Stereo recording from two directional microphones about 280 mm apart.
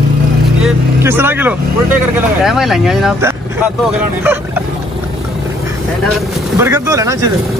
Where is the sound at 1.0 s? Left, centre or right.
Centre.